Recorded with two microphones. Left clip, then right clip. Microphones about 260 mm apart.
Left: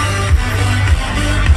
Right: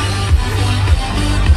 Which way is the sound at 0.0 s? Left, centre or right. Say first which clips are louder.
Left 2 dB; left.